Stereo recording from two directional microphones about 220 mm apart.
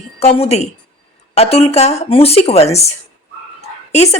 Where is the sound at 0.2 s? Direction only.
30° left (ahead or behind).